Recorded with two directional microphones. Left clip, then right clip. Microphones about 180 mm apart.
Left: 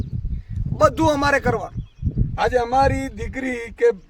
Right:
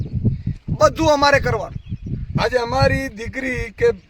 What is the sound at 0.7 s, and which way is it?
A man's voice, centre (ahead or behind).